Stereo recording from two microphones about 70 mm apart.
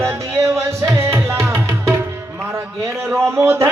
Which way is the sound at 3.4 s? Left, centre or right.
Right.